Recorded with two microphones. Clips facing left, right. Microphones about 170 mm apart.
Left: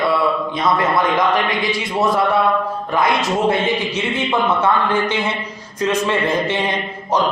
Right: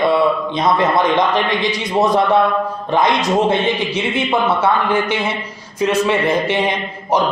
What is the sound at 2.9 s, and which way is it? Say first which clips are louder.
Speech: right 2 dB; 20° right (ahead or behind).